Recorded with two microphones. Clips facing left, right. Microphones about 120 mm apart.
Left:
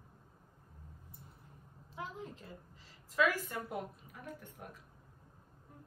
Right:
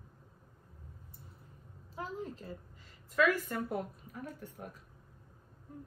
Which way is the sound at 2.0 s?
40° right (ahead or behind).